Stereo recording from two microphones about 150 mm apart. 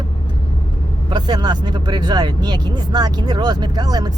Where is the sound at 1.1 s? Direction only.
30° right (ahead or behind).